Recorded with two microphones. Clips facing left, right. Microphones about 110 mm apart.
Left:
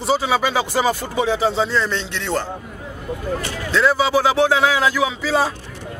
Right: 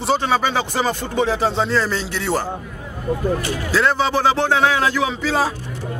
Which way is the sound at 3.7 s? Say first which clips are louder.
Left 2 dB; centre (ahead or behind).